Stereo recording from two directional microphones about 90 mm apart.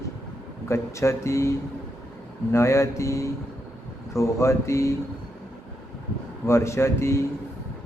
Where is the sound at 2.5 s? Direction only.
30° left (ahead or behind).